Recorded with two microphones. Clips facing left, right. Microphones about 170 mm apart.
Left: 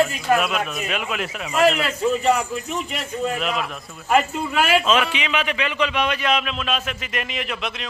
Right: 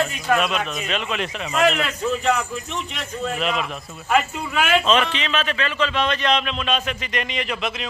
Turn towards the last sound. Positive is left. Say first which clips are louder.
# right 2 dB
turn(degrees=0)  # may be behind; listen again after turning